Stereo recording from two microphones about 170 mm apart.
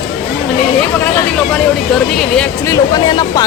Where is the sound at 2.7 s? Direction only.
25° left (ahead or behind).